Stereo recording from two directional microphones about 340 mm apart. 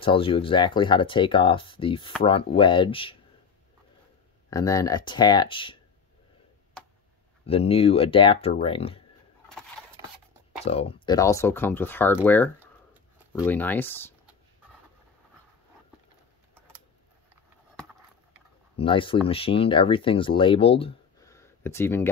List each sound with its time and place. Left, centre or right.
0.0 s speech: centre
4.5 s speech: centre
6.8 s tick: centre
7.4 s speech: centre
10.6 s speech: centre
18.8 s speech: centre